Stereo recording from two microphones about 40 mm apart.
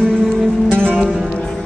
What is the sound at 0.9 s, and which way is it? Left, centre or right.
Music, centre.